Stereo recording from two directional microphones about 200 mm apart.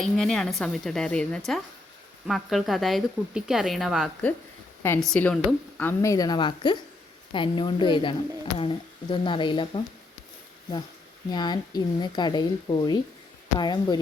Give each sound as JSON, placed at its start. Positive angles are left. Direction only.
{"t": 0.0, "sound": "a woman's voice", "side_deg": 5}
{"t": 4.8, "sound": "a woman's voice", "side_deg": 10}
{"t": 11.3, "sound": "speech", "side_deg": 20}